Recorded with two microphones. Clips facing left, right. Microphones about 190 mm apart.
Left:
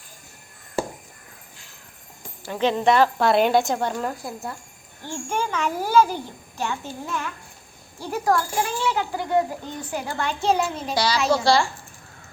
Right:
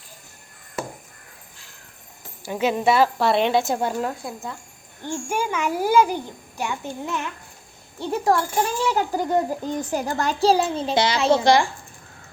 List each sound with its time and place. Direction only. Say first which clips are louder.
0.8 s crow: left 4 dB; 30° left (ahead or behind)
2.4 s a woman's voice: even; 10° right (ahead or behind)
5.0 s a child's voice: right 2 dB; 10° right (ahead or behind); by 8.4 s 25° right (ahead or behind)
8.9 s a child's voice: right 2 dB; 40° right (ahead or behind); by 11.7 s 20° right (ahead or behind)